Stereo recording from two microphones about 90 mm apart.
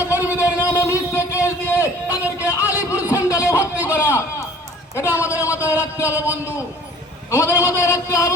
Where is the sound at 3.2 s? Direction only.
40° left (ahead or behind).